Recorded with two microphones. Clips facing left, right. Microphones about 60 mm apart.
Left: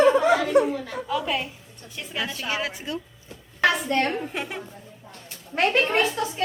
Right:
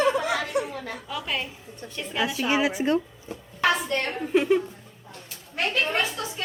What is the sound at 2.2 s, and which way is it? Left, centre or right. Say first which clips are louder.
Speech: right 4 dB; centre.